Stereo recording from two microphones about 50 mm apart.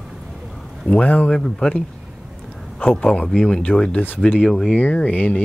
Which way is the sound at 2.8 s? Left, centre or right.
Centre.